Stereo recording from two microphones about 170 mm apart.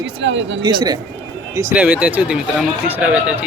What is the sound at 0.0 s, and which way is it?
Speech, 90° right.